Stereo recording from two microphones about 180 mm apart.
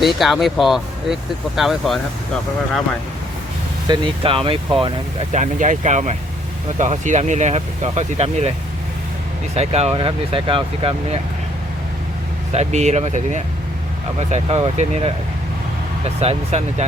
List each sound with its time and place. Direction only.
0.0 s speech: centre (ahead or behind)
3.8 s speech: 30° right (ahead or behind)
5.3 s speech: 45° right (ahead or behind)
9.6 s speech: 35° right (ahead or behind)
12.5 s speech: 40° right (ahead or behind)